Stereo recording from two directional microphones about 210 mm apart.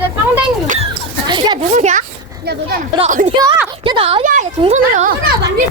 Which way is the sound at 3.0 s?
35° right (ahead or behind).